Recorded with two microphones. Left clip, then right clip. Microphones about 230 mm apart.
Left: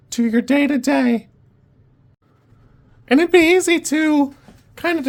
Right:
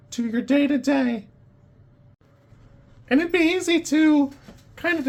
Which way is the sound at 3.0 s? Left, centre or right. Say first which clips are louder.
Left 7 dB; left.